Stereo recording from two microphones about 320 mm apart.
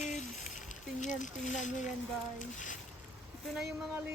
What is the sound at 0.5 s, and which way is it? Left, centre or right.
Speech, left.